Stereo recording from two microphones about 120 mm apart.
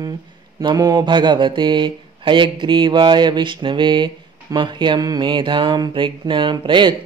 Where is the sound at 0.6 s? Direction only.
35° right (ahead or behind).